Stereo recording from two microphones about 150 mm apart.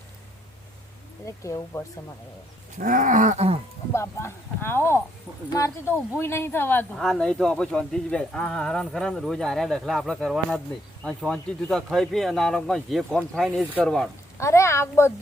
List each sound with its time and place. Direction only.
1.2 s a woman's voice: 20° left (ahead or behind)
2.7 s a sound: 65° right (ahead or behind); by 3.6 s 45° right (ahead or behind)
3.9 s speech: 20° left (ahead or behind)
6.9 s speech: 5° left (ahead or behind)
14.3 s a woman's voice: 20° left (ahead or behind)